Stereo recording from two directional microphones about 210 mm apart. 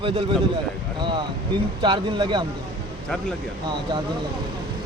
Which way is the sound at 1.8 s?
20° right (ahead or behind).